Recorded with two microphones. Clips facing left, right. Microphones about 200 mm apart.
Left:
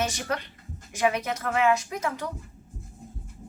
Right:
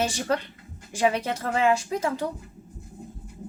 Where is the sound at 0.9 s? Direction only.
30° right (ahead or behind).